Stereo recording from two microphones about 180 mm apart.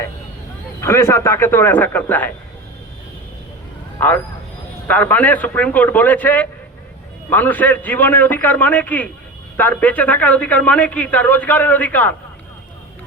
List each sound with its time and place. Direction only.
0.8 s a man's voice: 15° left (ahead or behind)
4.9 s a man's voice: 10° left (ahead or behind)